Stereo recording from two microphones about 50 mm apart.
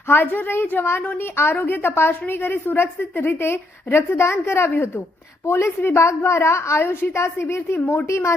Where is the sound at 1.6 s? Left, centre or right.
Left.